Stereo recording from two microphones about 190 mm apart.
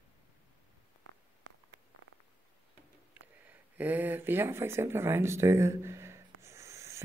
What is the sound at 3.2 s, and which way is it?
A woman's voice, 10° right (ahead or behind).